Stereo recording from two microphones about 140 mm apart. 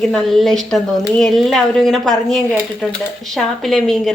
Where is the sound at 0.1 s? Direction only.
Centre (ahead or behind).